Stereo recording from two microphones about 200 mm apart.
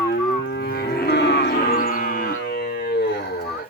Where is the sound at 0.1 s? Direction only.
55° left (ahead or behind).